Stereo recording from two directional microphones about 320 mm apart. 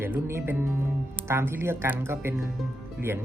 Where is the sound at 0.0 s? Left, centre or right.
Centre.